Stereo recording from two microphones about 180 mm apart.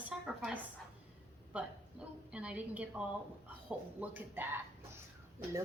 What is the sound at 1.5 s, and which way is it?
A woman's voice, 5° right (ahead or behind).